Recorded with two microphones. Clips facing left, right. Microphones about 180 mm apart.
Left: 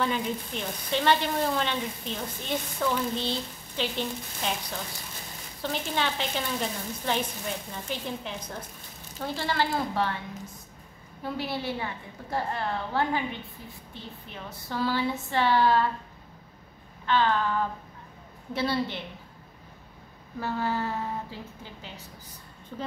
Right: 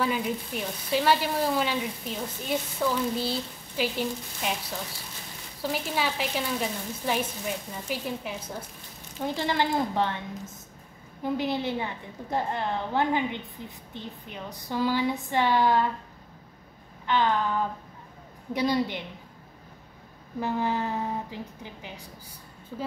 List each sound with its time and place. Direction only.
0.0 s speech: 5° right (ahead or behind)
17.0 s speech: 15° right (ahead or behind)
20.3 s speech: 15° right (ahead or behind)